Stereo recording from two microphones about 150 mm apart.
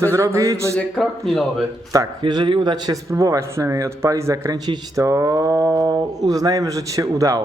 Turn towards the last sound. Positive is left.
turn(degrees=-20)  # may be behind; listen again after turning